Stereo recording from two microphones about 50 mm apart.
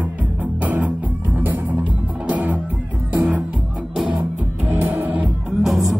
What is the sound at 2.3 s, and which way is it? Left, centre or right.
Music, right.